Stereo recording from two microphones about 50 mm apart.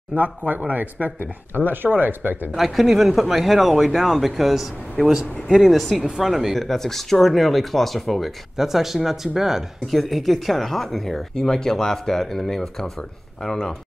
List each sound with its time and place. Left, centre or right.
0.1 s speech: right
2.5 s speech: centre